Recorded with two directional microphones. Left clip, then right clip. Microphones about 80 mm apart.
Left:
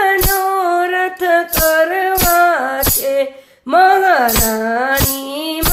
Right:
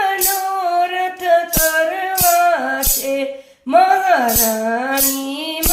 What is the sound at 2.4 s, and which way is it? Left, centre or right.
Music, left.